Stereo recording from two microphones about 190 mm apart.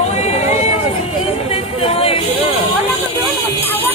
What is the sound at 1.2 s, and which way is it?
Vehicle, 30° left (ahead or behind).